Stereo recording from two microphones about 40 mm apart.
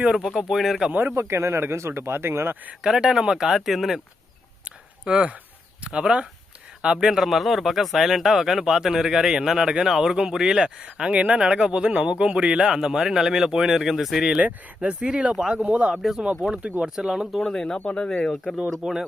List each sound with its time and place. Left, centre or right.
0.5 s speech: centre
1.1 s speech: right
2.8 s speech: centre
4.6 s a sound: right
5.8 s speech: right
7.1 s speech: centre
14.8 s speech: right
16.0 s speech: centre
16.4 s speech: right
17.4 s speech: centre
17.9 s speech: left
18.8 s speech: centre